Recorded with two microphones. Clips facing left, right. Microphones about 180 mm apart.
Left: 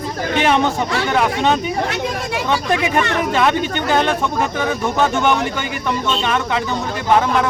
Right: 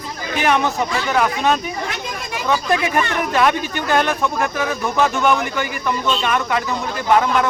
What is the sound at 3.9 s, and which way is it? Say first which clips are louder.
Speech: even; 25° left (ahead or behind).